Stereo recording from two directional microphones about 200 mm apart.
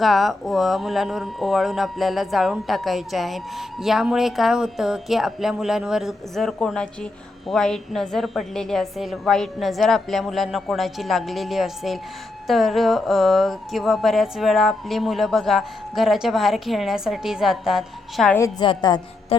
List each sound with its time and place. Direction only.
0.0 s speech: centre (ahead or behind)
18.3 s a woman's voice: 20° left (ahead or behind)